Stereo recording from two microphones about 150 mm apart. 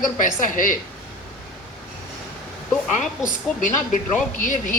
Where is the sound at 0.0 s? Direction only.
60° left (ahead or behind).